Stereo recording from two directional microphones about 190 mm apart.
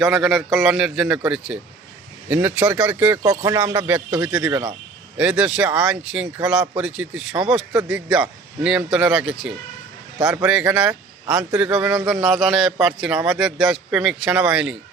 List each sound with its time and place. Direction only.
0.0 s speech: centre (ahead or behind)
3.2 s speech: 20° right (ahead or behind)
3.8 s a man's voice: 5° right (ahead or behind)